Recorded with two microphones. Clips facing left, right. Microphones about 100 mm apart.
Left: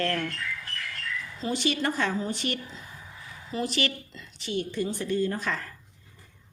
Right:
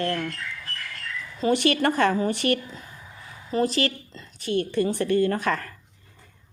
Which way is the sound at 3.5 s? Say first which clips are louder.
Right 6 dB; 40° right (ahead or behind).